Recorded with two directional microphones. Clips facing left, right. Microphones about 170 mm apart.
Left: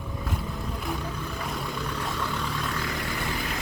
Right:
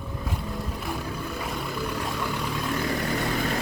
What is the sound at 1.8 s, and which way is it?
Vehicle, 10° right (ahead or behind).